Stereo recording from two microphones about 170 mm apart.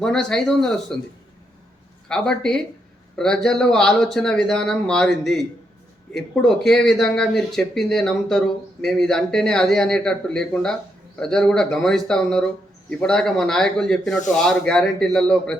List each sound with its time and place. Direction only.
0.0 s speech: 5° left (ahead or behind)
2.0 s speech: 5° left (ahead or behind)